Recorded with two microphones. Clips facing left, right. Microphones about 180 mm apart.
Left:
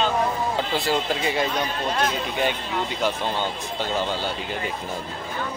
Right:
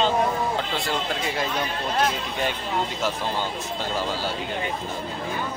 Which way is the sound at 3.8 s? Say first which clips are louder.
Left 3 dB; centre (ahead or behind).